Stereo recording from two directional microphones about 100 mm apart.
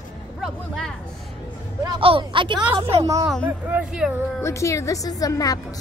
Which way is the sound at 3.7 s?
10° right (ahead or behind).